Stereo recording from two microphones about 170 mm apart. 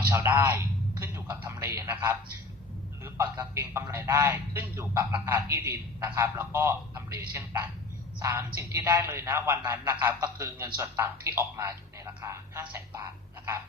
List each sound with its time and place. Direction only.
0.1 s a man's voice: 15° right (ahead or behind)